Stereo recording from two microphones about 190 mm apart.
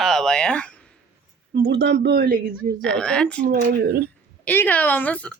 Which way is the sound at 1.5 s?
60° right (ahead or behind).